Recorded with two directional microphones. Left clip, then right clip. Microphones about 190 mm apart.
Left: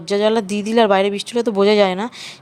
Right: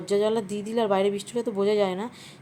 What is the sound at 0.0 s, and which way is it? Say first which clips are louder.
Speech: left 7 dB; 25° left (ahead or behind).